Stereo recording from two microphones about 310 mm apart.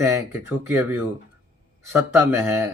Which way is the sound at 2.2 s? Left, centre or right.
Centre.